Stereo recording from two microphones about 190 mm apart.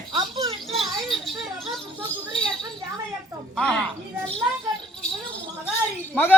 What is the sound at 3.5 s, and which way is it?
Speech, 5° left (ahead or behind).